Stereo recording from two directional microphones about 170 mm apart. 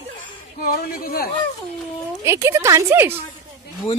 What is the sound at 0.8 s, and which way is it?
Speech, 60° left (ahead or behind).